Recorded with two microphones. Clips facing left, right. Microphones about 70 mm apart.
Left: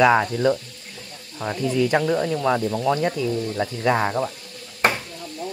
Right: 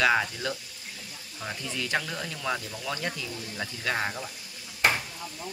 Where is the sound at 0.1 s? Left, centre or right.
Left.